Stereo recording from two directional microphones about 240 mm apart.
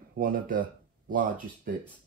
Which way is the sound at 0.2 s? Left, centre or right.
Right.